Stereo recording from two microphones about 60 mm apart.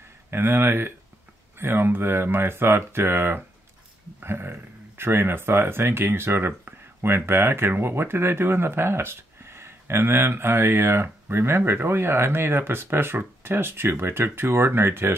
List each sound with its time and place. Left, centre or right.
0.3 s speech: right